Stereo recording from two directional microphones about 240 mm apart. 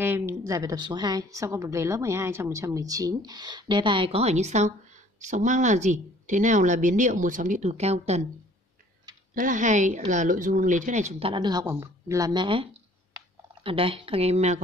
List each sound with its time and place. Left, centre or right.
0.0 s a woman's voice: centre; by 8.2 s right
9.3 s a woman's voice: right